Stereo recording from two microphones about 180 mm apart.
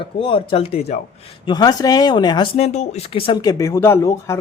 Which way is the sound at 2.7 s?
40° left (ahead or behind).